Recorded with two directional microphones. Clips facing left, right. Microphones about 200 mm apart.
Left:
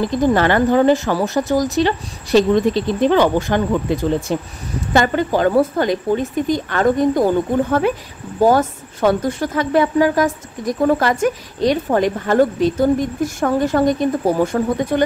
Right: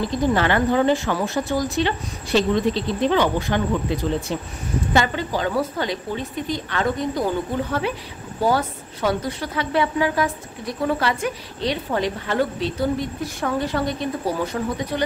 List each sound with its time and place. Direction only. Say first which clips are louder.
0.3 s a woman's voice: left 4 dB; 45° left (ahead or behind)
8.4 s a woman's voice: left 7 dB; 45° left (ahead or behind)